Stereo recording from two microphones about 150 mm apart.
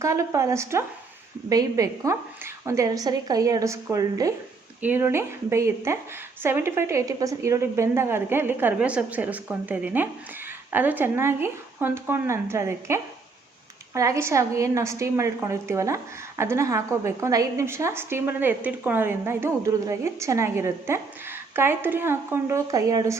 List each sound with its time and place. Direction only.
0.0 s a woman's voice: 20° right (ahead or behind)